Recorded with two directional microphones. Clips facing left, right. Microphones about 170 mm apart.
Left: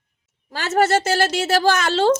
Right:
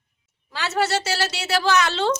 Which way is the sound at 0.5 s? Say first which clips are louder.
Left 5 dB; 45° left (ahead or behind).